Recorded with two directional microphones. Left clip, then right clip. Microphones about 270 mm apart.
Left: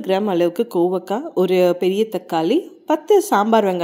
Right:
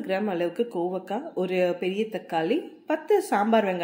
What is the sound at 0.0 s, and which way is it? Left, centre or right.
Speech, left.